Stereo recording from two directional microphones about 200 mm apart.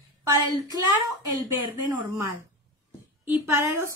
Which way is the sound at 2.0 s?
15° right (ahead or behind).